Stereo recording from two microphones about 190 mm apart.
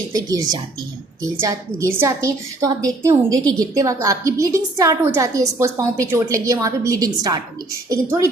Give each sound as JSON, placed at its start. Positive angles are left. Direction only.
{"t": 0.1, "sound": "a woman's voice", "side_deg": -20}